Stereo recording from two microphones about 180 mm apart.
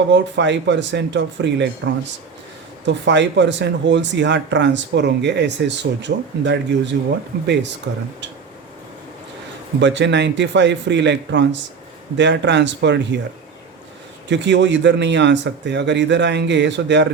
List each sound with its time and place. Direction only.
0.1 s speech: 80° right
9.8 s speech: 80° right
14.3 s speech: 75° right (ahead or behind)